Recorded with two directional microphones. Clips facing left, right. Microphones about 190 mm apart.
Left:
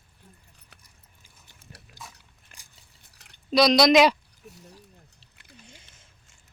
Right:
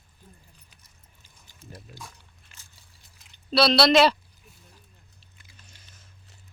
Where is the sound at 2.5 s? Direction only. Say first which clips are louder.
Left 3 dB; 55° left (ahead or behind).